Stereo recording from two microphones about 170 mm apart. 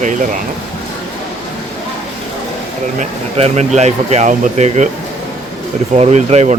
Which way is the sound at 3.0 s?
40° right (ahead or behind).